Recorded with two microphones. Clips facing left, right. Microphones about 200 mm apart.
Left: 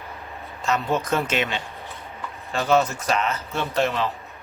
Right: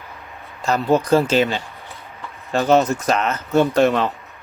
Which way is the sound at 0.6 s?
35° right (ahead or behind).